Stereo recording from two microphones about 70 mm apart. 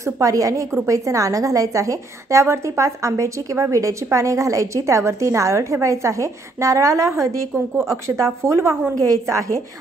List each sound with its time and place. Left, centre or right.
0.0 s a woman's voice: right
7.5 s a woman's voice: right
7.9 s a woman's voice: right
8.9 s a woman's voice: right